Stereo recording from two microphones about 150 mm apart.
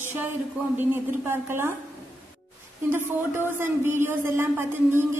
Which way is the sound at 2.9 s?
15° right (ahead or behind).